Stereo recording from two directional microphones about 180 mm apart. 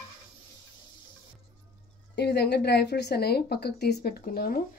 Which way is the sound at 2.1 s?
65° left (ahead or behind).